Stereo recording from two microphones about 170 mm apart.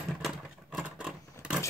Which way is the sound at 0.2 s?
5° right (ahead or behind).